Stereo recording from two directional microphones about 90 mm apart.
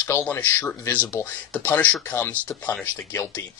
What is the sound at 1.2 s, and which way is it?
Speech, 35° left (ahead or behind).